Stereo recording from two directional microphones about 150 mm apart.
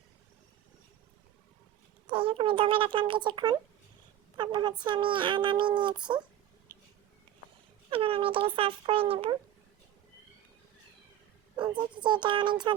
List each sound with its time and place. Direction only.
2.0 s a woman's voice: 35° right (ahead or behind)
7.9 s speech: 35° right (ahead or behind)
11.5 s speech: 35° right (ahead or behind)